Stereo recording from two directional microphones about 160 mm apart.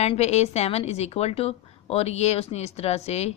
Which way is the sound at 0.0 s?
40° left (ahead or behind).